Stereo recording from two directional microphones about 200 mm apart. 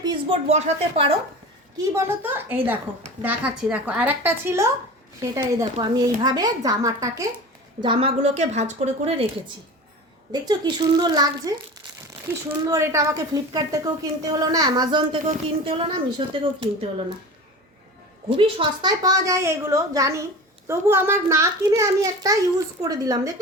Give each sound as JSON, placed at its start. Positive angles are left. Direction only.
{"t": 0.0, "sound": "a sound", "side_deg": -20}
{"t": 0.4, "sound": "speech", "side_deg": -35}
{"t": 1.8, "sound": "a child's voice", "side_deg": -10}
{"t": 10.4, "sound": "a woman's voice", "side_deg": -20}
{"t": 12.6, "sound": "a child's voice", "side_deg": -15}
{"t": 18.3, "sound": "a child's voice", "side_deg": -25}